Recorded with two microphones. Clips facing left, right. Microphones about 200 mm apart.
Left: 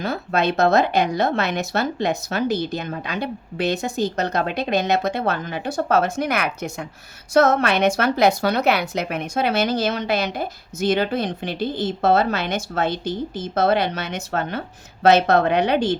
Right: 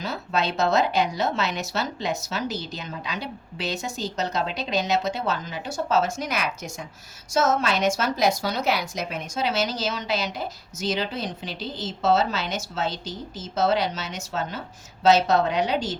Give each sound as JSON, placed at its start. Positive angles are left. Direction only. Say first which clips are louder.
{"t": 0.0, "sound": "a woman's voice", "louder": "left 5 dB", "side_deg": 55}